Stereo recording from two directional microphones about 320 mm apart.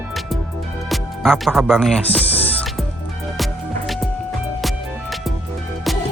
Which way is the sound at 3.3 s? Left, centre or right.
Centre.